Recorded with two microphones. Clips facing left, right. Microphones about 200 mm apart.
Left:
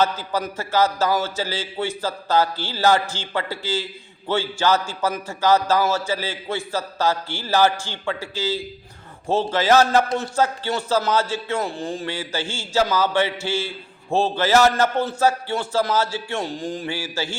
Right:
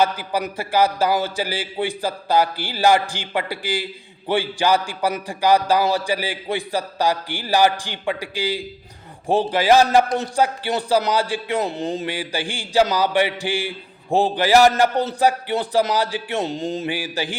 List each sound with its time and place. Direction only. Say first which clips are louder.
0.0 s a man's voice: right 1 dB; 15° right (ahead or behind)